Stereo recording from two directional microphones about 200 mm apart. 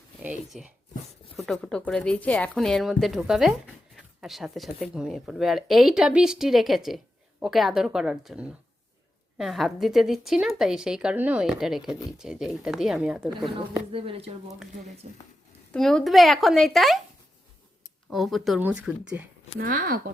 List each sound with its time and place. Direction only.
0.2 s a woman's voice: 5° right (ahead or behind)
11.9 s speech: 20° left (ahead or behind)
12.1 s a woman's voice: 5° right (ahead or behind)
13.9 s speech: 30° right (ahead or behind)
15.7 s a woman's voice: 5° left (ahead or behind)
18.1 s a woman's voice: centre (ahead or behind)
19.5 s speech: 45° right (ahead or behind)